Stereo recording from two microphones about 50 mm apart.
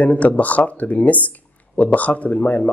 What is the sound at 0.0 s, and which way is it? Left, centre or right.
Speech, left.